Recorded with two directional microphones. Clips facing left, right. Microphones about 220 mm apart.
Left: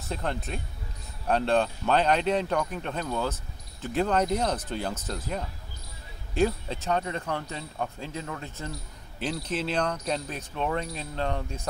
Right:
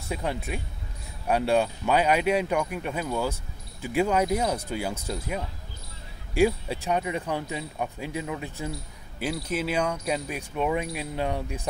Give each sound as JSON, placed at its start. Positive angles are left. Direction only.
{"t": 0.1, "sound": "speech", "side_deg": -10}